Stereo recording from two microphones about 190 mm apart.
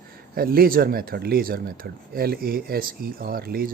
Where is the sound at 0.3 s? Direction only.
50° right (ahead or behind).